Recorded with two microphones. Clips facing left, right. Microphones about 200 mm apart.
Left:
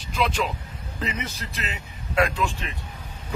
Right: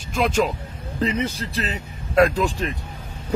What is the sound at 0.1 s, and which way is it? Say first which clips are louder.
Speech: right 5 dB; 45° right (ahead or behind).